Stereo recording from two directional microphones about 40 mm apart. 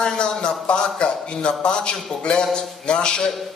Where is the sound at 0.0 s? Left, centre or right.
Left.